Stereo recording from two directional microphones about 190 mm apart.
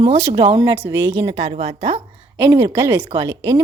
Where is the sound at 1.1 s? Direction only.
35° right (ahead or behind).